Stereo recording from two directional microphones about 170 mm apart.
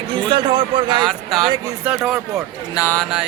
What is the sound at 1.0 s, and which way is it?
Speech, centre (ahead or behind).